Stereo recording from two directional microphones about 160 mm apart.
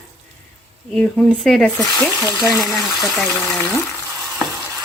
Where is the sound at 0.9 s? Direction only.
5° left (ahead or behind).